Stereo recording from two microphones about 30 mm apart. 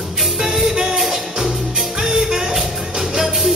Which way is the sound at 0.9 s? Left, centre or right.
Centre.